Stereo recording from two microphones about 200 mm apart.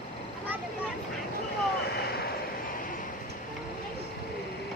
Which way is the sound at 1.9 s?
50° left (ahead or behind).